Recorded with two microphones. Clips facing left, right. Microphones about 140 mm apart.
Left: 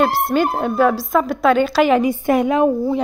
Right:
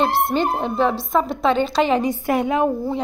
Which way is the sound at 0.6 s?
25° right (ahead or behind).